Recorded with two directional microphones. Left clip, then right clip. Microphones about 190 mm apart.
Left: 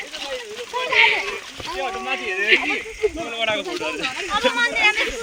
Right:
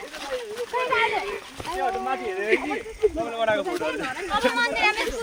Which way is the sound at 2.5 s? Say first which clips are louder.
Left 6 dB; 10° right (ahead or behind).